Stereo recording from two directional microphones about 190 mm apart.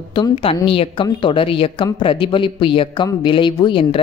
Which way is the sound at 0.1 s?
25° left (ahead or behind).